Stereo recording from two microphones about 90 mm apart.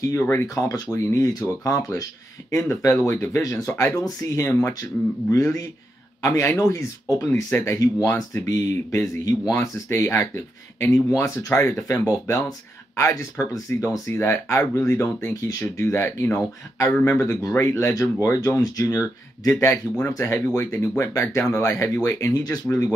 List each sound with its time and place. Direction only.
0.1 s speech: 25° left (ahead or behind)
2.5 s speech: 30° left (ahead or behind)